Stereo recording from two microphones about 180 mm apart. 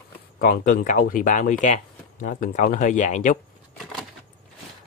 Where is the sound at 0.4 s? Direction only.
50° left (ahead or behind).